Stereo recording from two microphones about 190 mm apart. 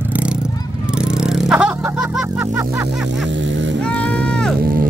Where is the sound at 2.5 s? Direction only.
15° right (ahead or behind).